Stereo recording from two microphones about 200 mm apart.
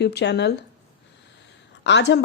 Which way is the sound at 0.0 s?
55° left (ahead or behind).